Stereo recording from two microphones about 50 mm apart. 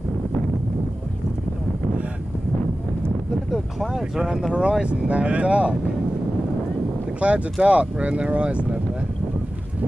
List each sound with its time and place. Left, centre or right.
3.5 s vehicle: centre
4.2 s speech: centre
7.2 s speech: right